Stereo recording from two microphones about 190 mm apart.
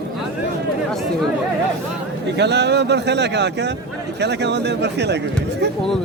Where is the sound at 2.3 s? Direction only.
65° right (ahead or behind).